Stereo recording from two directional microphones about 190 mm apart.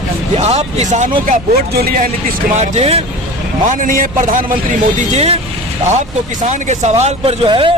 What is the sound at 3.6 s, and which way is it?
A man's voice, 45° right (ahead or behind).